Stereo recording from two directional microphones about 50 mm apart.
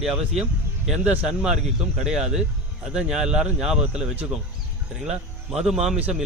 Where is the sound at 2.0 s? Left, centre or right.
Centre.